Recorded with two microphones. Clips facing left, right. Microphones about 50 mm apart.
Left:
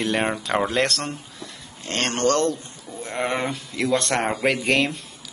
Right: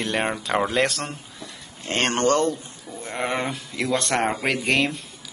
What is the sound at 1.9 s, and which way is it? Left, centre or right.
Speech, right.